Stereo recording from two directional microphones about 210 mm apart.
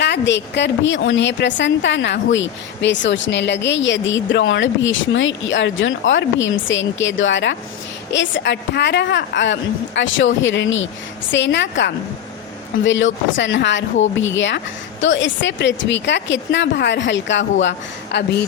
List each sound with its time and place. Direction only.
0.0 s a woman's voice: 55° left (ahead or behind)